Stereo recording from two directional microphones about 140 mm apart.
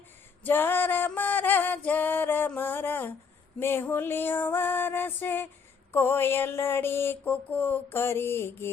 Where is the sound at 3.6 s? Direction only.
15° left (ahead or behind).